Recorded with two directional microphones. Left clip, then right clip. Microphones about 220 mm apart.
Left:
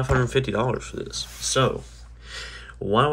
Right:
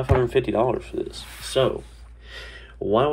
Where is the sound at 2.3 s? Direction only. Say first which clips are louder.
Left 3 dB; 20° left (ahead or behind).